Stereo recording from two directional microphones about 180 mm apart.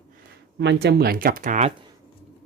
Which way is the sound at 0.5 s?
70° right (ahead or behind).